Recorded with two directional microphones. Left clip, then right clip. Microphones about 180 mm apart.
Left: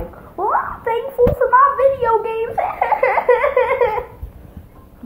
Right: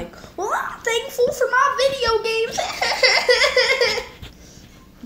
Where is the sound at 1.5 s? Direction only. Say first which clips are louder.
Left 5 dB; 30° right (ahead or behind).